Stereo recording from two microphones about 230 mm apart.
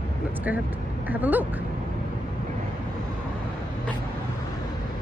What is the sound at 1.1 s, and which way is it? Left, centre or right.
Speech, centre.